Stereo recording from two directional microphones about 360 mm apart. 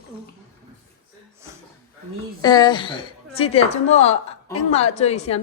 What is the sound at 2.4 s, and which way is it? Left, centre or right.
A woman's voice, centre.